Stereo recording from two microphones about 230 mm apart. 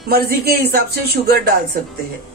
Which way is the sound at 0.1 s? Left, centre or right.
Right.